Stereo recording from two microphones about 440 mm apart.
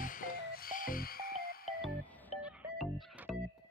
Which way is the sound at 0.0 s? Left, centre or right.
Centre.